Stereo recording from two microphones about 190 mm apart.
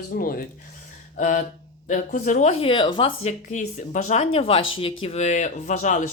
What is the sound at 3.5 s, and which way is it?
Speech, 40° left (ahead or behind).